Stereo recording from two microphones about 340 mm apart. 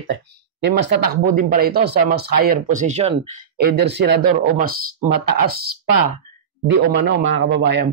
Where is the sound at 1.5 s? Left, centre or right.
Right.